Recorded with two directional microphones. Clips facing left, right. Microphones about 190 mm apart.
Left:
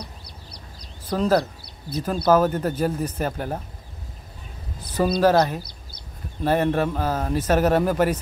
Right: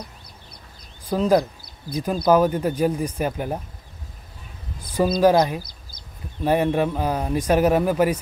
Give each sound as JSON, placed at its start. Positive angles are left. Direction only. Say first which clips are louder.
{"t": 1.0, "sound": "speech", "louder": "right 2 dB", "side_deg": -10}
{"t": 5.2, "sound": "speech", "louder": "right 2 dB", "side_deg": -10}
{"t": 5.6, "sound": "a sound", "louder": "even", "side_deg": 60}
{"t": 6.4, "sound": "speech", "louder": "right 1 dB", "side_deg": -10}